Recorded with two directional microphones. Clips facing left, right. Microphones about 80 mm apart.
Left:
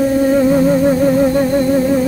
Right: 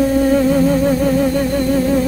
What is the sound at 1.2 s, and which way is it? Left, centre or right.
Music, left.